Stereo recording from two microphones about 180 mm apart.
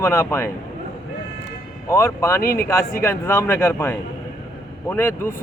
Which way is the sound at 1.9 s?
15° left (ahead or behind).